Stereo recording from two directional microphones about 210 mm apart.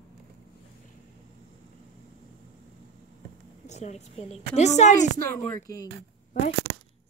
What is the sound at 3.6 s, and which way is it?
A woman's voice, 30° left (ahead or behind).